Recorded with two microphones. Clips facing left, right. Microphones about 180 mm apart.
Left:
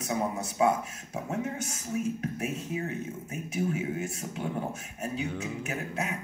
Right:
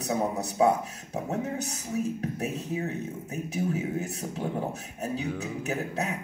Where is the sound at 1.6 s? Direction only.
35° right (ahead or behind).